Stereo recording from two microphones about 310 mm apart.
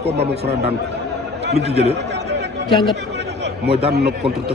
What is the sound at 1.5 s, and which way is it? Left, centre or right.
Speech, centre.